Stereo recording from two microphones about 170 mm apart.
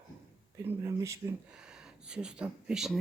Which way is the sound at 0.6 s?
15° right (ahead or behind).